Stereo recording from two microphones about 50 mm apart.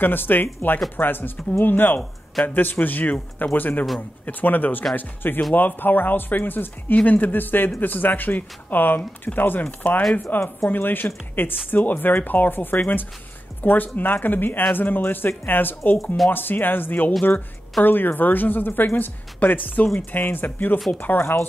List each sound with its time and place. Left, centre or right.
0.0 s speech: left
9.7 s speech: left
10.3 s speech: left
21.2 s speech: left